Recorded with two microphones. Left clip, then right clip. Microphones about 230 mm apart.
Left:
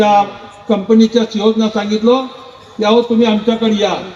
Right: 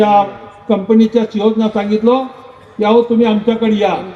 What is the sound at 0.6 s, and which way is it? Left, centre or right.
A man's voice, right.